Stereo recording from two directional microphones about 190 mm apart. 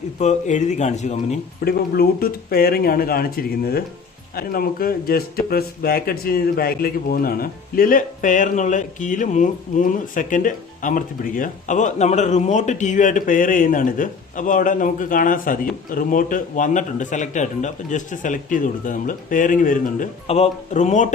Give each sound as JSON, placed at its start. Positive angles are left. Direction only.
{"t": 0.2, "sound": "speech", "side_deg": 40}
{"t": 1.6, "sound": "a man's voice", "side_deg": 55}